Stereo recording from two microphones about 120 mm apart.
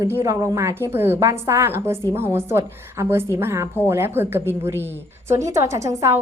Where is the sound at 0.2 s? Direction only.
25° right (ahead or behind).